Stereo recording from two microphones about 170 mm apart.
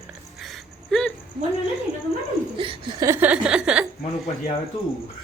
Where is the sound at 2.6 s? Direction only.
30° right (ahead or behind).